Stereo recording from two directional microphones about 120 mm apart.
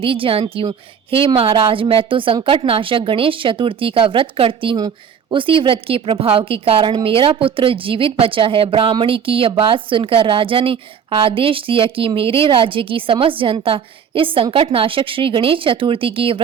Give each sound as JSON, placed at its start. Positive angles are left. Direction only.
{"t": 0.0, "sound": "a woman's voice", "side_deg": -50}